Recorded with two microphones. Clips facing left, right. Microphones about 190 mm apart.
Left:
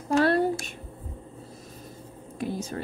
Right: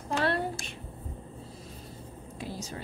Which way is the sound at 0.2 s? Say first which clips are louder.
Left 7 dB; 40° left (ahead or behind).